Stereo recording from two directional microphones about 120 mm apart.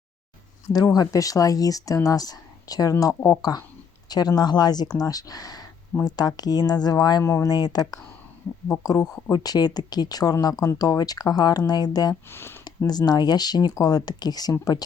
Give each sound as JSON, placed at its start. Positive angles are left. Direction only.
{"t": 0.7, "sound": "a woman's voice", "side_deg": 30}
{"t": 12.3, "sound": "a woman's voice", "side_deg": 20}
{"t": 12.6, "sound": "speech", "side_deg": 35}